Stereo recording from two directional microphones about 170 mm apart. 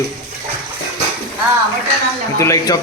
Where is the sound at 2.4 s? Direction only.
20° left (ahead or behind).